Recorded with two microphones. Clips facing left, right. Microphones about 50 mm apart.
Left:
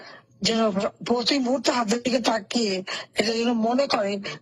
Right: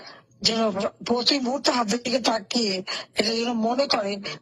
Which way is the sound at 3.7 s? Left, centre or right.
Centre.